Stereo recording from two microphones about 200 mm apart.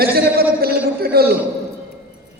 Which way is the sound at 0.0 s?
50° right (ahead or behind).